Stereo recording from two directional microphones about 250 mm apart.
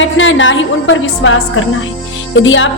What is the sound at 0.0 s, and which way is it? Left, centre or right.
A woman's voice, left.